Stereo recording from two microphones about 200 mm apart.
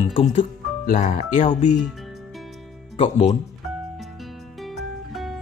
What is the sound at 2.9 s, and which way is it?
Speech, 30° left (ahead or behind).